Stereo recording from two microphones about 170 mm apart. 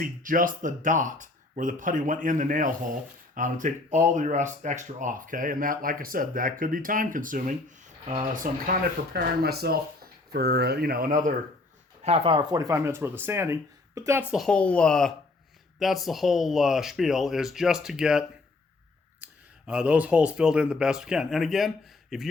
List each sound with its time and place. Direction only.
0.0 s speech: 50° right (ahead or behind)
9.1 s speech: 65° right (ahead or behind)
12.0 s speech: 35° right (ahead or behind); by 22.3 s centre (ahead or behind)